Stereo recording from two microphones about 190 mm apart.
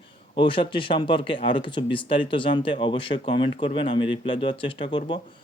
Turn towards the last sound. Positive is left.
turn(degrees=25)  # may be behind; listen again after turning